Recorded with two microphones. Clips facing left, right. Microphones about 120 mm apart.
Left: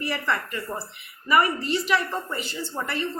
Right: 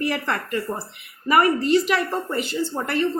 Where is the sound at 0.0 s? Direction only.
50° right (ahead or behind).